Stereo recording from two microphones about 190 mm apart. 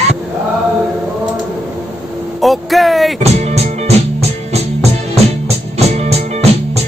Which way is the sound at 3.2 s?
35° right (ahead or behind).